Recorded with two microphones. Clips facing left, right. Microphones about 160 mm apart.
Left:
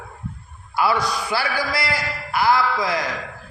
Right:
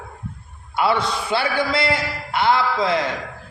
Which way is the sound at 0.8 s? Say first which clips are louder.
Right 1 dB; 25° right (ahead or behind).